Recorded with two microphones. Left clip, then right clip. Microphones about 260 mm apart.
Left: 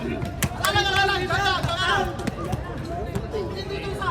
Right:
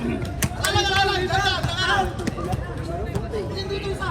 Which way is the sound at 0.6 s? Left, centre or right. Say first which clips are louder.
Even; centre.